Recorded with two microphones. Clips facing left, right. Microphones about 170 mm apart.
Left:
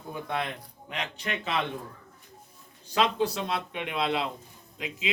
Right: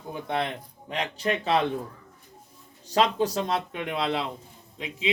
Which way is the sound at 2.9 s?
40° right (ahead or behind).